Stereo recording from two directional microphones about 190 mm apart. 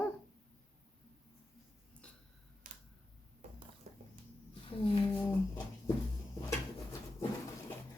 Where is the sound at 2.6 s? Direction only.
45° right (ahead or behind).